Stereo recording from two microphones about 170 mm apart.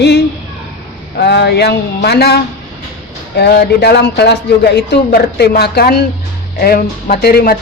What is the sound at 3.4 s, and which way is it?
Speech, 75° left (ahead or behind).